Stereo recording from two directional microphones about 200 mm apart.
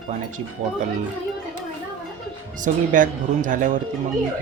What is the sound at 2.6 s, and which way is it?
Speech, 40° right (ahead or behind).